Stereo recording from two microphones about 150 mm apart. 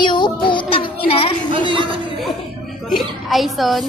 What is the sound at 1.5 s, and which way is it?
Speech, 35° right (ahead or behind).